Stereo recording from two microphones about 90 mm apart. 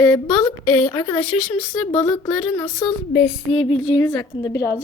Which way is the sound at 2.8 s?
25° left (ahead or behind).